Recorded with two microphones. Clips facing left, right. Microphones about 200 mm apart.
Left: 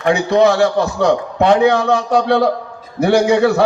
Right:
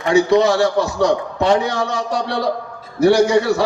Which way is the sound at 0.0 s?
60° left (ahead or behind).